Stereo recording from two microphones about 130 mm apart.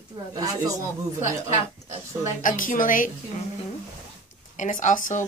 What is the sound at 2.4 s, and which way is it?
Speech, 90° left.